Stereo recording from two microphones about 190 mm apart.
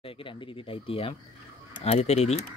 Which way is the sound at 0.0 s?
30° left (ahead or behind).